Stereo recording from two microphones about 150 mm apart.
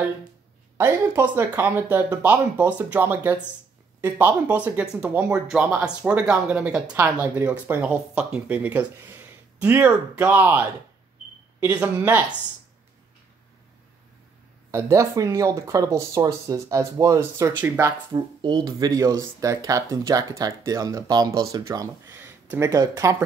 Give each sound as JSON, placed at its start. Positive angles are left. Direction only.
{"t": 0.7, "sound": "speech", "side_deg": -15}
{"t": 14.7, "sound": "speech", "side_deg": -20}
{"t": 18.1, "sound": "speech", "side_deg": -30}